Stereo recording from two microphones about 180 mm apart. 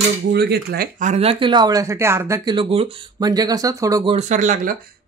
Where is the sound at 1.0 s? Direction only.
35° right (ahead or behind); by 4.2 s 20° right (ahead or behind).